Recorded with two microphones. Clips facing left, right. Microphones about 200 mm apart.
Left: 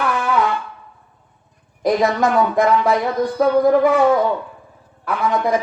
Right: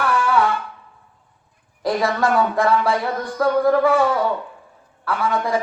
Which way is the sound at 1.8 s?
20° left (ahead or behind).